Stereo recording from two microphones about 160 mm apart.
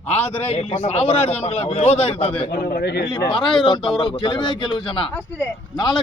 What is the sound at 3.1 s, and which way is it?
A man's voice, 30° left (ahead or behind).